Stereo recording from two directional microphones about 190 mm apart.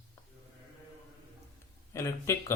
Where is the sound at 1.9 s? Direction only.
15° left (ahead or behind).